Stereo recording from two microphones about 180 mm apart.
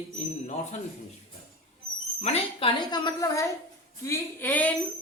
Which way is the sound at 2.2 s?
35° left (ahead or behind).